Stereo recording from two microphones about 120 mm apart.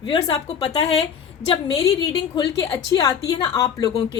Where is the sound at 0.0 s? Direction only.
40° left (ahead or behind).